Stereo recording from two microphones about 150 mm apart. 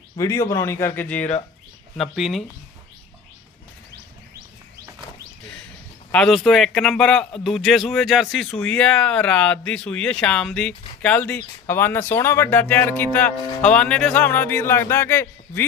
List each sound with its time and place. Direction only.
0.2 s a man's voice: 20° left (ahead or behind)
2.0 s speech: centre (ahead or behind)
6.1 s a man's voice: 5° left (ahead or behind)